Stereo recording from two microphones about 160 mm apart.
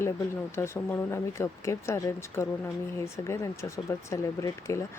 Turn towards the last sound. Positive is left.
turn(degrees=20)  # may be behind; listen again after turning